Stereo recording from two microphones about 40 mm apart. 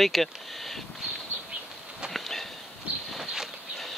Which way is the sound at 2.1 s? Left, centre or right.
Centre.